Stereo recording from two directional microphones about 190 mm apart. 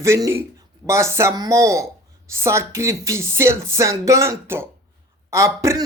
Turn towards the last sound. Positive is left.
turn(degrees=-15)  # may be behind; listen again after turning